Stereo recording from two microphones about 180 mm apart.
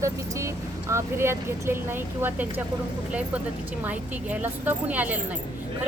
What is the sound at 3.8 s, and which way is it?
Speech, 10° right (ahead or behind).